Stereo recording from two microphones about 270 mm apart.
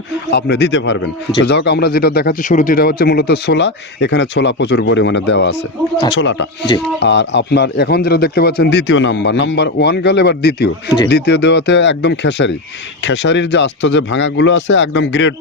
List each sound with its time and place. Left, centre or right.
0.3 s speech: left